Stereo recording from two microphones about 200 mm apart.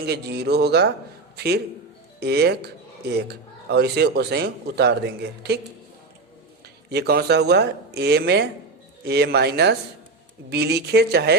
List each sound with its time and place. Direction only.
0.0 s a man's voice: 55° right (ahead or behind)
6.9 s a man's voice: 55° right (ahead or behind)